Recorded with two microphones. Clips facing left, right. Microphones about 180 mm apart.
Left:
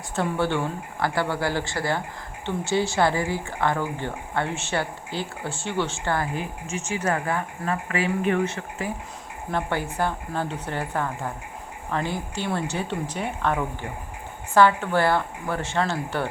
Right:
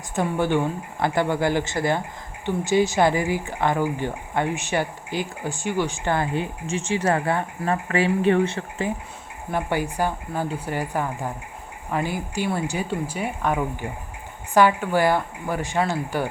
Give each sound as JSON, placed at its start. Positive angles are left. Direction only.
{"t": 0.2, "sound": "speech", "side_deg": -15}
{"t": 9.5, "sound": "speech", "side_deg": -10}